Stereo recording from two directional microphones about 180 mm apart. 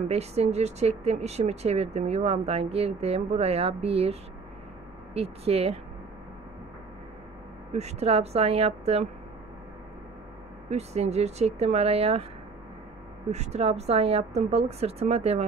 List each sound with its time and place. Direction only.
0.1 s speech: 35° right (ahead or behind)
7.7 s speech: 35° right (ahead or behind)
10.7 s speech: 35° right (ahead or behind)
13.3 s speech: 35° right (ahead or behind)